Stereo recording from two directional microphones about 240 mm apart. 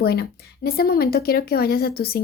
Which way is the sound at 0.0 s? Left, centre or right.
Left.